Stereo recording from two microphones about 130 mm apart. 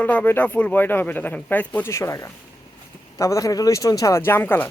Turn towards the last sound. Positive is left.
turn(degrees=15)  # may be behind; listen again after turning